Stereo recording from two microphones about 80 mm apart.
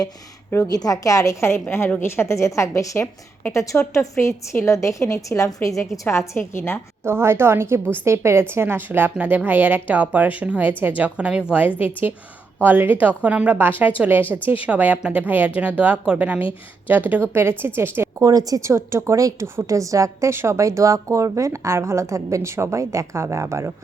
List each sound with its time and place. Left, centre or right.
0.7 s a woman's voice: left
7.0 s a woman's voice: right; by 16.4 s centre
16.4 s a woman's voice: left
16.9 s a woman's voice: right
18.2 s a woman's voice: right
18.7 s a woman's voice: right
20.3 s a woman's voice: right